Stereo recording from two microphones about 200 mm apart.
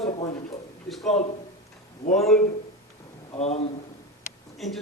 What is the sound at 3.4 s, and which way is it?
Speech, 30° left (ahead or behind).